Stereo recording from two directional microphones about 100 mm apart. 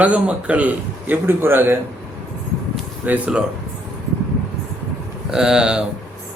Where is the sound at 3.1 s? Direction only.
10° right (ahead or behind).